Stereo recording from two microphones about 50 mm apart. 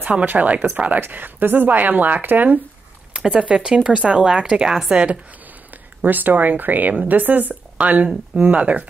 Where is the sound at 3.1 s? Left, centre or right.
Right.